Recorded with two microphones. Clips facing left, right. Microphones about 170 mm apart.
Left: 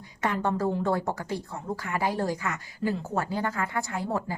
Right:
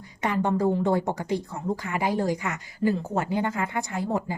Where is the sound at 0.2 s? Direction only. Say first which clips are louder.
Right 3 dB; 15° right (ahead or behind).